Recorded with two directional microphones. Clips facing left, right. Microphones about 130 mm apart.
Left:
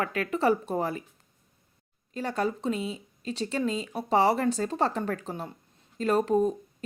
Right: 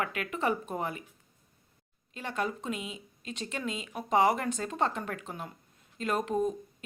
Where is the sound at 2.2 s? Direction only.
35° left (ahead or behind).